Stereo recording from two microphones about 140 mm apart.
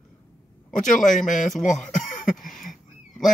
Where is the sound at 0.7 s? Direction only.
65° left (ahead or behind).